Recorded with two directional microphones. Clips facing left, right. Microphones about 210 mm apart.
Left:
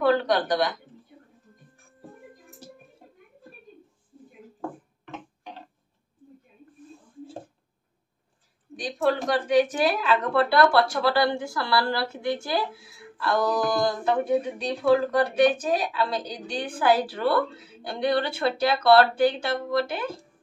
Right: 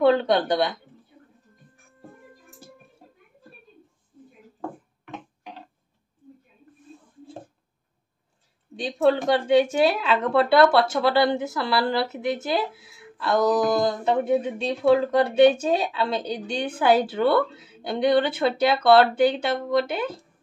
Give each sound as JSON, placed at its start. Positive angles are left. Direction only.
{"t": 0.0, "sound": "speech", "side_deg": -25}
{"t": 8.7, "sound": "speech", "side_deg": -25}